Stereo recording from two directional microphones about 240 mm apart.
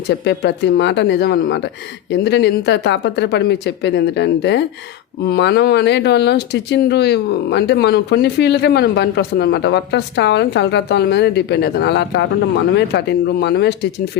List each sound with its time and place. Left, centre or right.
0.1 s speech: left